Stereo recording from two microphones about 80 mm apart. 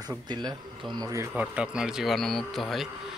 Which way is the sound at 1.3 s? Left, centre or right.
Centre.